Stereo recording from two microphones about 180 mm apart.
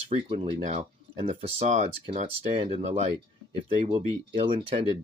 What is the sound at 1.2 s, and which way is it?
Speech, 45° right (ahead or behind).